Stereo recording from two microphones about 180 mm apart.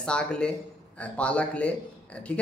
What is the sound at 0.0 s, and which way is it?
A man's voice, 5° left (ahead or behind).